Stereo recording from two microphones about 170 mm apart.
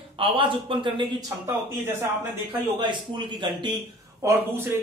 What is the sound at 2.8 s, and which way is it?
Speech, 25° right (ahead or behind).